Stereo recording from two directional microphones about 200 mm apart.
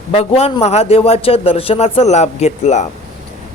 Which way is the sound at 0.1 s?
30° left (ahead or behind).